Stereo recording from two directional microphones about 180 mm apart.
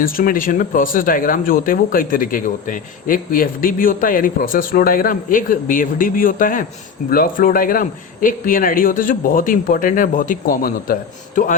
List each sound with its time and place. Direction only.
0.0 s speech: 50° left (ahead or behind)